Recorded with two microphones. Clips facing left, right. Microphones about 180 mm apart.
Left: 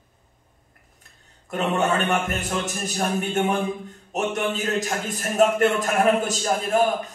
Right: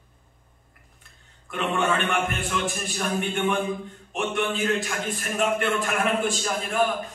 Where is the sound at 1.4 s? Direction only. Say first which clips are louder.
Left 2 dB; 40° left (ahead or behind).